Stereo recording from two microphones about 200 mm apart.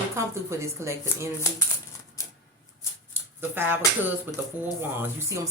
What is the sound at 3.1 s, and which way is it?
A woman's voice, 10° right (ahead or behind).